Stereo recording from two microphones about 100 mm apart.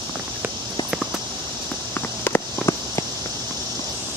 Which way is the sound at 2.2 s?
30° left (ahead or behind).